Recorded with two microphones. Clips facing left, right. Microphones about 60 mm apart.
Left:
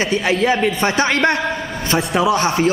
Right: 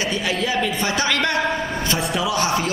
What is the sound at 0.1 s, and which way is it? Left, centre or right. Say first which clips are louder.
Speech: left 6 dB; left.